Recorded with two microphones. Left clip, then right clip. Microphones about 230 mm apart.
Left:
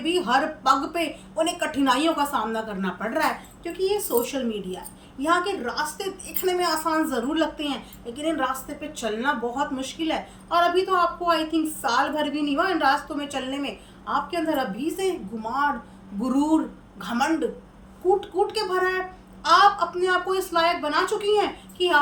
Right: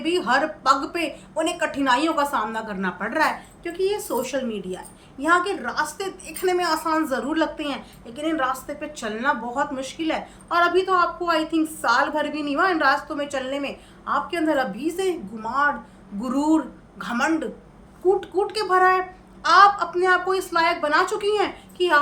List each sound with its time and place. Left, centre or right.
0.0 s a woman's voice: centre